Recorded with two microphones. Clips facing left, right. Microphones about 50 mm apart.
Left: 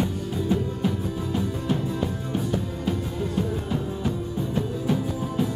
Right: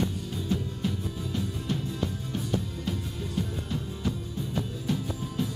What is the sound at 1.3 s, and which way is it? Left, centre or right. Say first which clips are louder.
Music: left 6 dB; centre.